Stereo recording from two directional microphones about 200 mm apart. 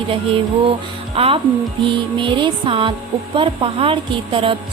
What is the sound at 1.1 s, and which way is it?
Speech, 30° right (ahead or behind).